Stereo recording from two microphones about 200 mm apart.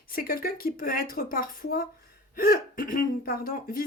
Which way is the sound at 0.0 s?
50° left (ahead or behind).